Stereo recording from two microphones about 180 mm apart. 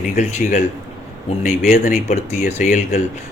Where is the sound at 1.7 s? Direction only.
45° left (ahead or behind).